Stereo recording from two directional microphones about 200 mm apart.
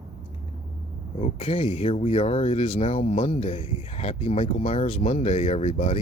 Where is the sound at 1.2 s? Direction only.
30° left (ahead or behind).